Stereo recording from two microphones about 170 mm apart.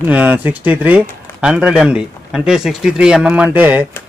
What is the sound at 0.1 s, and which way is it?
Speech, 10° right (ahead or behind).